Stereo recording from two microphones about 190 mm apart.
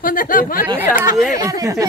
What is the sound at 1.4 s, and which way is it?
Speech, 15° right (ahead or behind).